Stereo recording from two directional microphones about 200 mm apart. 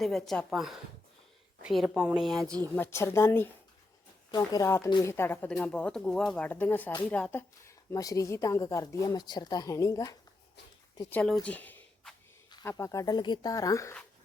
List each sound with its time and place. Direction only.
0.0 s speech: centre (ahead or behind)
2.7 s a woman's voice: 10° left (ahead or behind)
11.1 s speech: 5° left (ahead or behind)
11.4 s a sound: 10° left (ahead or behind)
12.5 s a woman's voice: 20° left (ahead or behind)